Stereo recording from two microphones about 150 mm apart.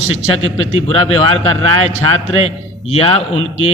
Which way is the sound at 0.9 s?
40° left (ahead or behind).